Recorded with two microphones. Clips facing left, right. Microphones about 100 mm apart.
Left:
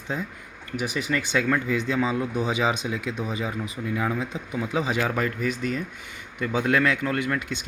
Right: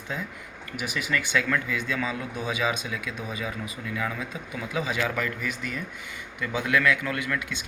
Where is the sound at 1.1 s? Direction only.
25° left (ahead or behind).